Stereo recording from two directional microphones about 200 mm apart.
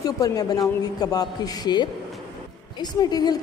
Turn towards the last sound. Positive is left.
turn(degrees=20)  # may be behind; listen again after turning